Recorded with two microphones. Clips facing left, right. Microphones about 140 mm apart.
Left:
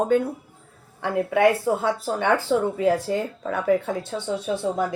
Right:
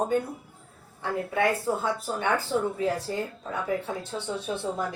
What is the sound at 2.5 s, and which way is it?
A woman's voice, 90° left.